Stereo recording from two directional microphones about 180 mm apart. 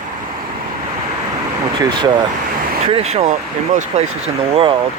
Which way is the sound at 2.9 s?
40° right (ahead or behind).